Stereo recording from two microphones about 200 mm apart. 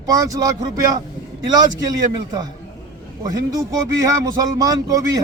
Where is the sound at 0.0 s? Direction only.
15° right (ahead or behind).